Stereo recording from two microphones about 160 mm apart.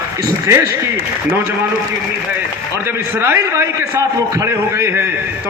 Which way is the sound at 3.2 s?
15° right (ahead or behind).